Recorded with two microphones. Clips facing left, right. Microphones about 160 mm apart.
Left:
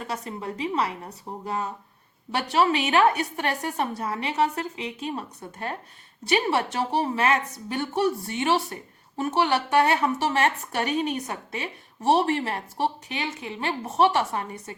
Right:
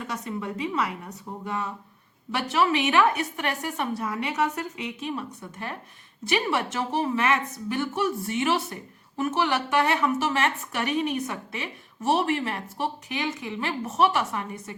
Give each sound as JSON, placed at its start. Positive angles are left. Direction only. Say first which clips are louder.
{"t": 0.1, "sound": "a woman's voice", "louder": "right 1 dB", "side_deg": 30}